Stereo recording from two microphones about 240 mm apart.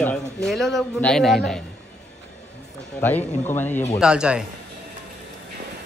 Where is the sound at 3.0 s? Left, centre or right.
Centre.